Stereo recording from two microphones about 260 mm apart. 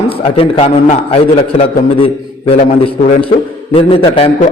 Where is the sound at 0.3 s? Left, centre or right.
Left.